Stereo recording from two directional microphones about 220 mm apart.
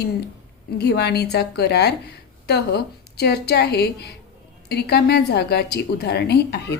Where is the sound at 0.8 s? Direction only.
50° left (ahead or behind).